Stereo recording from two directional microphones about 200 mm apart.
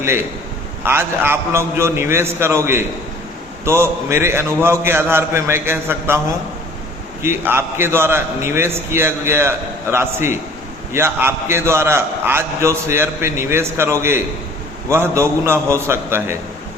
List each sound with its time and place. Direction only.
0.0 s a man's voice: 10° right (ahead or behind)
7.2 s a man's voice: 10° right (ahead or behind)